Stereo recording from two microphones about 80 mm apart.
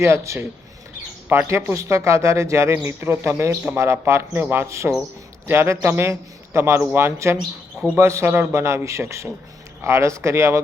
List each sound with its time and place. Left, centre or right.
0.0 s a man's voice: right